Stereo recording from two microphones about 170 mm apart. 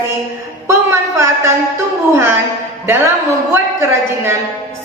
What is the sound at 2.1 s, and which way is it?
A woman's voice, 15° right (ahead or behind).